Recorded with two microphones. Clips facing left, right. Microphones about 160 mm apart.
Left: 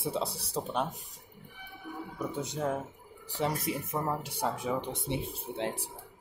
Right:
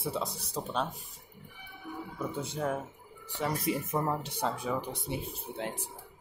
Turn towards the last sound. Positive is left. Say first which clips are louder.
# left 3 dB
turn(degrees=25)  # may be behind; listen again after turning